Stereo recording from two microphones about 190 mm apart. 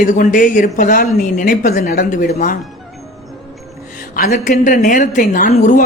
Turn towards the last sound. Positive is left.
turn(degrees=40)  # may be behind; listen again after turning